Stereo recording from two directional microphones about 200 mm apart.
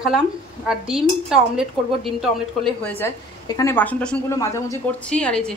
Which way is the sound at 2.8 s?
10° left (ahead or behind).